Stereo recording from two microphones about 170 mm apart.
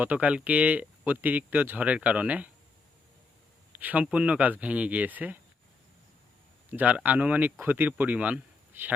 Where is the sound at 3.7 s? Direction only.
10° right (ahead or behind).